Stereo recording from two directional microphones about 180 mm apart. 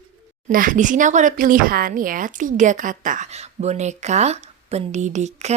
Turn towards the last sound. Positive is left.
turn(degrees=-40)  # may be behind; listen again after turning